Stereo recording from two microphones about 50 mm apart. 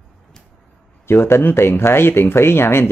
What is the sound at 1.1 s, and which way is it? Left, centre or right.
Speech, left.